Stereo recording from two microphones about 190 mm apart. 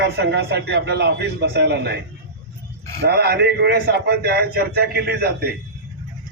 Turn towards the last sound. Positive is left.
turn(degrees=-55)  # may be behind; listen again after turning